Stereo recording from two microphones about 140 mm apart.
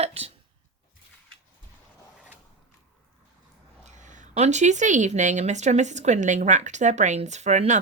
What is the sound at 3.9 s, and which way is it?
Speech, 60° right (ahead or behind).